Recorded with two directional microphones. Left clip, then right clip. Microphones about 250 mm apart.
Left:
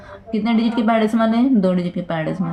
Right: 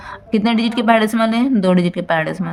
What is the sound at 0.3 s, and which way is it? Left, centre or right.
Speech, right.